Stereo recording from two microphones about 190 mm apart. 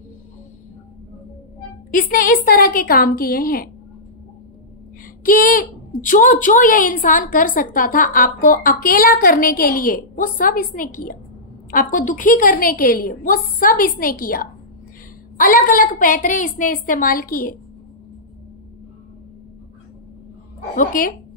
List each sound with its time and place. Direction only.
1.9 s a woman's voice: 45° left (ahead or behind)
5.2 s a woman's voice: 45° left (ahead or behind)
20.7 s a woman's voice: 45° left (ahead or behind)